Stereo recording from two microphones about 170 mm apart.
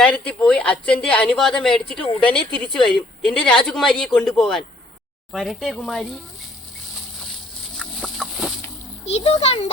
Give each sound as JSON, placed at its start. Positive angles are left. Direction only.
{"t": 0.0, "sound": "speech", "side_deg": 5}
{"t": 7.8, "sound": "chicken", "side_deg": 0}
{"t": 9.0, "sound": "a child's voice", "side_deg": 40}